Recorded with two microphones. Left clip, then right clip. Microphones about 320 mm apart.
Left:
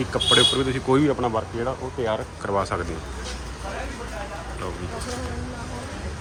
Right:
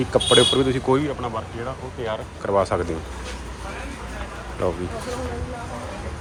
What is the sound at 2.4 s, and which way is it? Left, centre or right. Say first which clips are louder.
Speech: right 5 dB; centre.